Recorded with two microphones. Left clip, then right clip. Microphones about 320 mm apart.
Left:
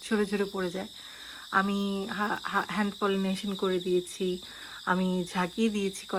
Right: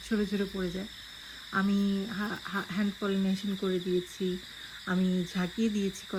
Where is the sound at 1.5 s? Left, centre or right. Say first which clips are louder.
Left 3 dB; left.